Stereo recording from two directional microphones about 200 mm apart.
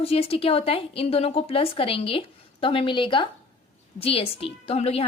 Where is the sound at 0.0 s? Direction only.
30° left (ahead or behind).